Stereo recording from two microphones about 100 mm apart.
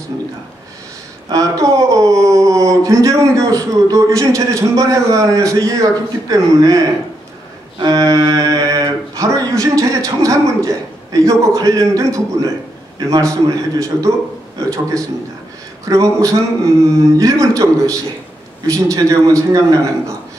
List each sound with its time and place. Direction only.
1.3 s speech: 35° right (ahead or behind)
7.8 s speech: 35° right (ahead or behind)